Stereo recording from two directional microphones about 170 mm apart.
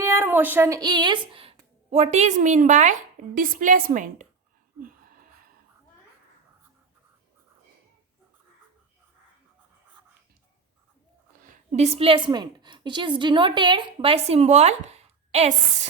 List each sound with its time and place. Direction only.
0.0 s a woman's voice: 15° right (ahead or behind); by 4.3 s 50° right (ahead or behind)
11.4 s a woman's voice: 45° right (ahead or behind)